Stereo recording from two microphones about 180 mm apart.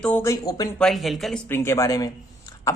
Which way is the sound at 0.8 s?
Centre (ahead or behind).